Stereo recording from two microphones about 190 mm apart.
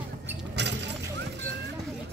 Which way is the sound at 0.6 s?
65° right (ahead or behind).